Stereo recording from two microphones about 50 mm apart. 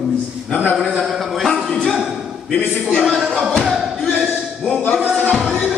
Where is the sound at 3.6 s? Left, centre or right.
Centre.